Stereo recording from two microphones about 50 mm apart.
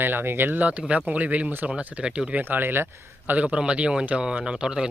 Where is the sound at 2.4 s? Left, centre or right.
Right.